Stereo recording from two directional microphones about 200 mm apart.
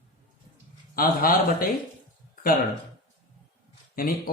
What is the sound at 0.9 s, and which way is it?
Speech, 45° left (ahead or behind).